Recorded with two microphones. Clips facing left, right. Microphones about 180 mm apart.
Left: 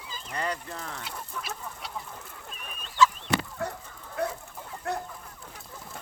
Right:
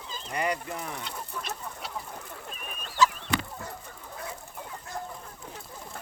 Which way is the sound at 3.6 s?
65° left (ahead or behind).